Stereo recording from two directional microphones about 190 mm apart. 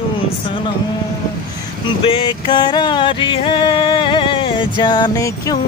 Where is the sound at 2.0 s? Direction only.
25° left (ahead or behind).